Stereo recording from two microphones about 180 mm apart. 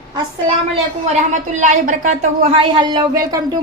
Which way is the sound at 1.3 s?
45° right (ahead or behind).